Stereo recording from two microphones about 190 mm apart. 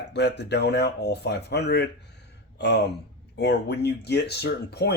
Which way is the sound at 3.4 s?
60° left (ahead or behind).